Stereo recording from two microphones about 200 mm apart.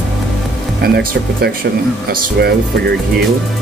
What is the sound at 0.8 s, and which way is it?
Speech, 50° right (ahead or behind).